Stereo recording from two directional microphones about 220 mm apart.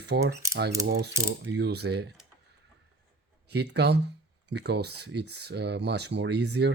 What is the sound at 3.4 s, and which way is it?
Speech, 50° right (ahead or behind).